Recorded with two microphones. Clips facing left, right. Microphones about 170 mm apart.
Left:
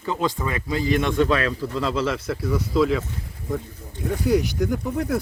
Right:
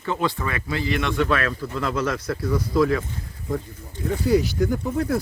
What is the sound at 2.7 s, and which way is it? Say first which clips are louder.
Speech: even; 15° left (ahead or behind).